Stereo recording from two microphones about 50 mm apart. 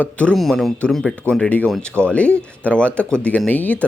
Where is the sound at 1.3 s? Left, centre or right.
Left.